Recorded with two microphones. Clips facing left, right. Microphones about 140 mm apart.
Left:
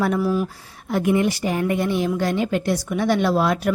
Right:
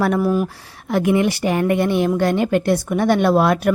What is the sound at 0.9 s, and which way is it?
A woman's voice, 90° right.